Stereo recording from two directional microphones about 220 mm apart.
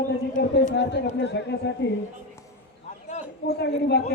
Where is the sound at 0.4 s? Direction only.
45° left (ahead or behind).